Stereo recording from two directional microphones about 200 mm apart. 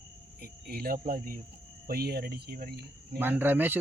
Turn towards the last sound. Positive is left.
turn(degrees=-10)  # may be behind; listen again after turning